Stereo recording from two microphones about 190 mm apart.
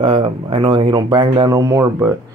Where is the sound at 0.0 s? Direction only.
30° right (ahead or behind).